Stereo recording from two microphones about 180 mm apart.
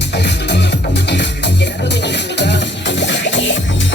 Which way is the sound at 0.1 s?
70° left (ahead or behind).